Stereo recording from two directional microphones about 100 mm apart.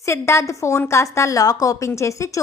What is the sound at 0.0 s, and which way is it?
A woman's voice, 25° left (ahead or behind).